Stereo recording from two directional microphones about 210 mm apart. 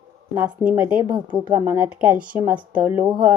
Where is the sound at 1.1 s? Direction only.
20° right (ahead or behind).